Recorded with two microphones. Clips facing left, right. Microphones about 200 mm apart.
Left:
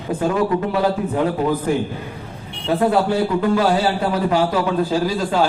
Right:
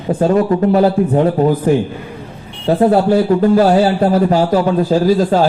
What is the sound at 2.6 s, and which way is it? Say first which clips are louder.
A man's voice: right 6 dB; 40° right (ahead or behind).